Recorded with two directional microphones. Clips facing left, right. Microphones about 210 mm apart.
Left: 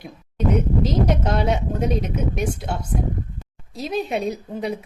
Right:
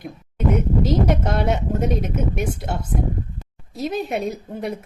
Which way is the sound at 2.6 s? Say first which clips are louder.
Even; centre (ahead or behind).